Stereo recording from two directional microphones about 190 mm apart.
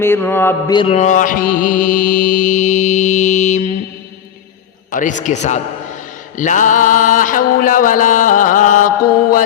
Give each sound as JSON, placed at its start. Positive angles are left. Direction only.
{"t": 0.0, "sound": "mantra", "side_deg": 10}
{"t": 0.7, "sound": "mantra", "side_deg": 30}
{"t": 4.9, "sound": "mantra", "side_deg": 40}